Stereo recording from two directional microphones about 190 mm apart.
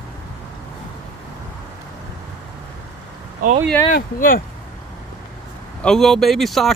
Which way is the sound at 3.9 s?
45° left (ahead or behind).